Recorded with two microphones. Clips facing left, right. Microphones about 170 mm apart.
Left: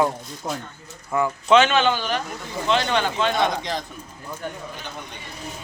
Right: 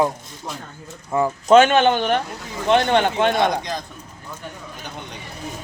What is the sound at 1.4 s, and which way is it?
Speech, 45° right (ahead or behind).